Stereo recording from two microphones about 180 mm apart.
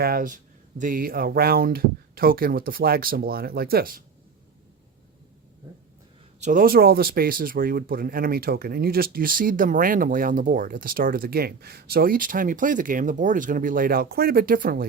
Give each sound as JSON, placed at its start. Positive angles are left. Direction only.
{"t": 0.0, "sound": "speech", "side_deg": -55}
{"t": 6.4, "sound": "speech", "side_deg": -50}